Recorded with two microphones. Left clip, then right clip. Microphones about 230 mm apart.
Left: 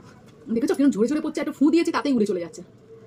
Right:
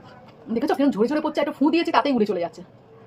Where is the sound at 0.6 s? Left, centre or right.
Centre.